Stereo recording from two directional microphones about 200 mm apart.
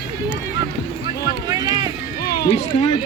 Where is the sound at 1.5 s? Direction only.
20° right (ahead or behind).